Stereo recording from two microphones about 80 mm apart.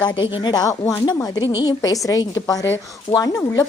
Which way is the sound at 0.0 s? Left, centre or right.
Left.